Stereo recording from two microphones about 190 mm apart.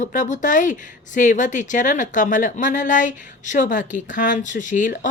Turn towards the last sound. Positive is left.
turn(degrees=40)  # may be behind; listen again after turning